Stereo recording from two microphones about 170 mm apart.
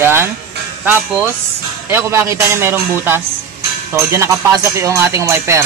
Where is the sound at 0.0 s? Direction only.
15° right (ahead or behind).